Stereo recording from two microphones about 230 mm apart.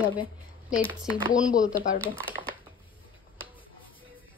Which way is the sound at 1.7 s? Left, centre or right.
Left.